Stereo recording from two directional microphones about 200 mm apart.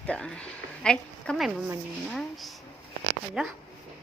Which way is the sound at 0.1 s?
5° left (ahead or behind).